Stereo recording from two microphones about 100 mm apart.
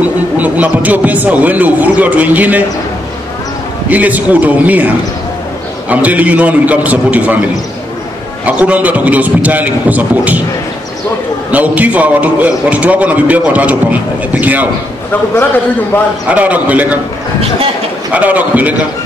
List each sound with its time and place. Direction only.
0.0 s speech: 15° right (ahead or behind)
3.9 s speech: 15° right (ahead or behind)
8.5 s speech: 15° right (ahead or behind)
11.5 s speech: 15° right (ahead or behind)
16.3 s speech: 15° right (ahead or behind)
18.1 s speech: 15° right (ahead or behind)